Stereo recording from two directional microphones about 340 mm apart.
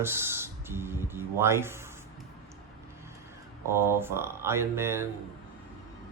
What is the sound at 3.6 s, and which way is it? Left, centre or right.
Speech, centre.